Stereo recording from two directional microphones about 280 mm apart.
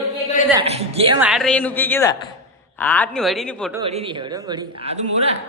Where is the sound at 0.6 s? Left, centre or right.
Right.